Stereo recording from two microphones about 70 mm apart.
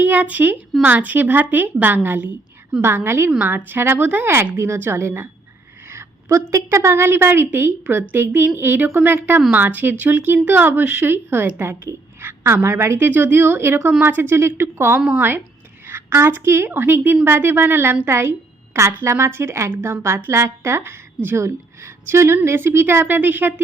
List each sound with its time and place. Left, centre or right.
0.0 s speech: right
2.8 s a woman's voice: right
12.2 s a sound: right
12.6 s a woman's voice: right
13.1 s a woman's voice: right